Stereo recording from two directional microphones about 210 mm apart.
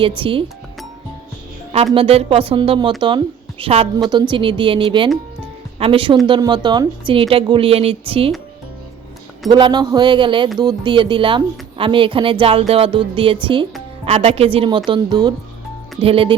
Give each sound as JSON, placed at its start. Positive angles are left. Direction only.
{"t": 0.2, "sound": "speech", "side_deg": -25}
{"t": 1.7, "sound": "speech", "side_deg": -25}
{"t": 9.5, "sound": "speech", "side_deg": -20}